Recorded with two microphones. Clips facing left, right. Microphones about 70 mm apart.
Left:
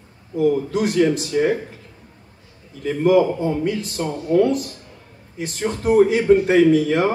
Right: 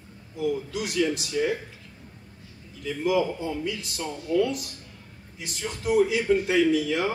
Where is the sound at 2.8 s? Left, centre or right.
Left.